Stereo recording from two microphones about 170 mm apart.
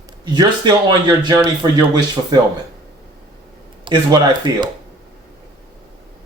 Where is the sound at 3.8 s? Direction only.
25° right (ahead or behind).